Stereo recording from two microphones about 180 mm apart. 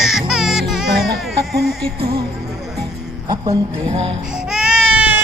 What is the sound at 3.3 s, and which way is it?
Speech, 35° right (ahead or behind).